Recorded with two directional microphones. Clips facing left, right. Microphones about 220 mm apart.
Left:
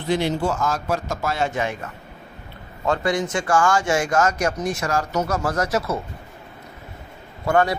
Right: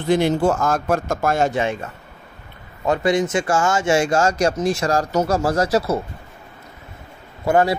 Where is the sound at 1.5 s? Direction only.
25° right (ahead or behind).